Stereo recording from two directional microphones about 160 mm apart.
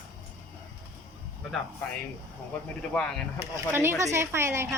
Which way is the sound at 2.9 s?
5° left (ahead or behind).